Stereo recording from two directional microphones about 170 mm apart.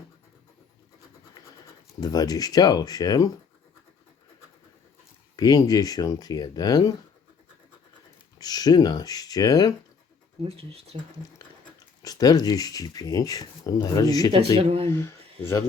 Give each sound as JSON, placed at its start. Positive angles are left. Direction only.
{"t": 2.0, "sound": "speech", "side_deg": 20}
{"t": 5.4, "sound": "speech", "side_deg": 20}
{"t": 8.4, "sound": "speech", "side_deg": 25}
{"t": 10.4, "sound": "speech", "side_deg": -35}
{"t": 12.0, "sound": "speech", "side_deg": 20}
{"t": 14.6, "sound": "speech", "side_deg": -35}
{"t": 14.8, "sound": "speech", "side_deg": 15}